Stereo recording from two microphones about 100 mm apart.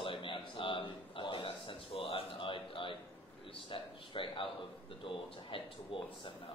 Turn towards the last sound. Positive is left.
turn(degrees=60)  # may be behind; listen again after turning